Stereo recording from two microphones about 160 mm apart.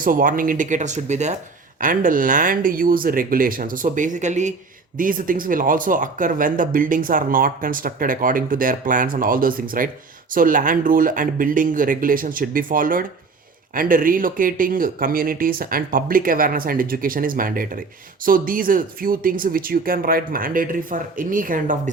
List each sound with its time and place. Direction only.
0.0 s speech: 60° right (ahead or behind)
1.8 s speech: 55° right (ahead or behind)
4.9 s speech: 60° right (ahead or behind)